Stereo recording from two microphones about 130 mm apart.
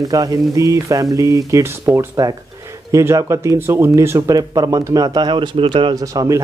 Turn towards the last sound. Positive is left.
turn(degrees=-25)  # may be behind; listen again after turning